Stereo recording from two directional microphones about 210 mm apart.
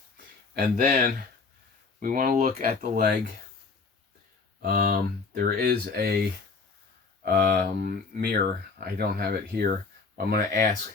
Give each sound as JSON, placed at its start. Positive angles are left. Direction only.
{"t": 0.8, "sound": "speech", "side_deg": -45}
{"t": 4.6, "sound": "speech", "side_deg": -45}